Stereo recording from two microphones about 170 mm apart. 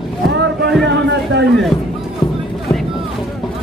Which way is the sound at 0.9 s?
90° right.